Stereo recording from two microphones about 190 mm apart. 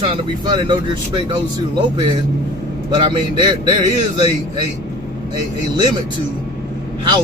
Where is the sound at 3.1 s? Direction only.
25° right (ahead or behind).